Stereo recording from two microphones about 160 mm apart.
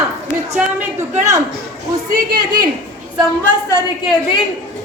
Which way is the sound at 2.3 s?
25° right (ahead or behind).